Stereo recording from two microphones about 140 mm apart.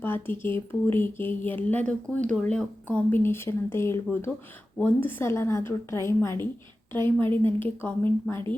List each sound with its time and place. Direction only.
0.0 s a woman's voice: 15° left (ahead or behind)